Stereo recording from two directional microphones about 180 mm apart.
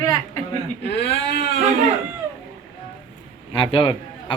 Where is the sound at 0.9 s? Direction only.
70° left (ahead or behind).